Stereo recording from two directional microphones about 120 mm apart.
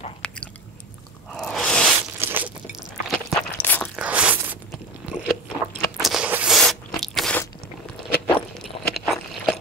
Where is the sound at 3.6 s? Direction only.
15° left (ahead or behind).